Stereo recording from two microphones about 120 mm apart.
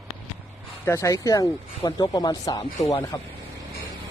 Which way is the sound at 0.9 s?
25° left (ahead or behind).